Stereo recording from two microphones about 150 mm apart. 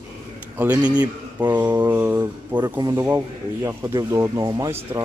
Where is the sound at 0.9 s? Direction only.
25° right (ahead or behind).